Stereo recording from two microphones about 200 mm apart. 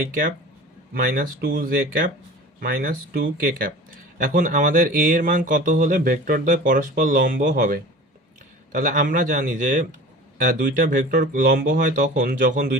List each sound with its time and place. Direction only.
0.9 s speech: 45° right (ahead or behind)